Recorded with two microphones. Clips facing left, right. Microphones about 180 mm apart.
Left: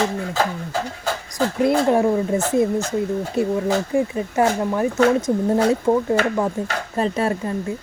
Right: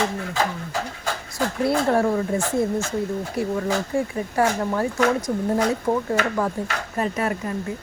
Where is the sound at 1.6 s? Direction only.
15° left (ahead or behind).